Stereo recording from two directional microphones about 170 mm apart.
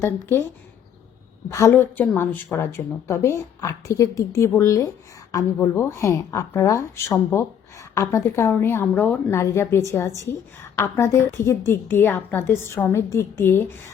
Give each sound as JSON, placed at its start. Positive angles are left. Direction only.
{"t": 0.0, "sound": "speech", "side_deg": 15}
{"t": 1.5, "sound": "speech", "side_deg": 15}